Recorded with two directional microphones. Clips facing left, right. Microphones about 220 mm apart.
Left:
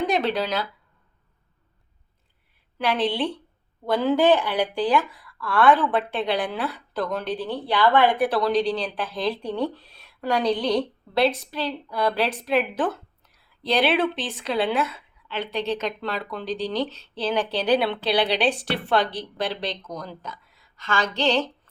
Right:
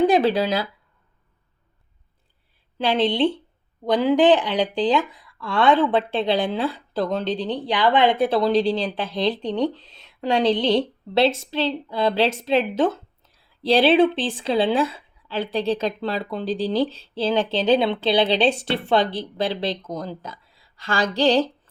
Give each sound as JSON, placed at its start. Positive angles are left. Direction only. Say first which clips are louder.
{"t": 0.1, "sound": "a woman's voice", "louder": "right 5 dB", "side_deg": -30}
{"t": 2.7, "sound": "a woman's voice", "louder": "right 3 dB", "side_deg": -25}